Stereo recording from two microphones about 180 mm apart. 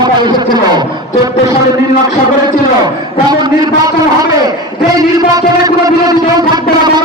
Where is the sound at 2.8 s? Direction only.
25° right (ahead or behind).